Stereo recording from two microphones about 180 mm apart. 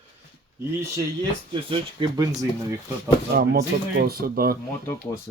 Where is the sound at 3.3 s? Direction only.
60° right (ahead or behind).